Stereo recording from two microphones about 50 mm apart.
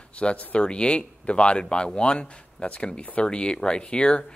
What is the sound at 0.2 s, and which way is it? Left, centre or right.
Speech, left.